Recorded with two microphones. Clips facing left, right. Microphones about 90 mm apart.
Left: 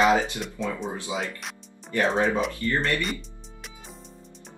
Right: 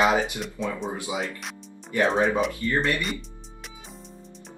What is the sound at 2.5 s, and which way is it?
Speech, 20° right (ahead or behind).